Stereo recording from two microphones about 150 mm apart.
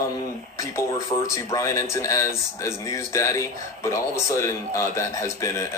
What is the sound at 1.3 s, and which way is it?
Speech, 20° left (ahead or behind).